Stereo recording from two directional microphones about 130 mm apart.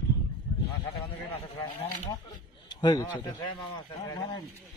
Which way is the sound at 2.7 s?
30° left (ahead or behind).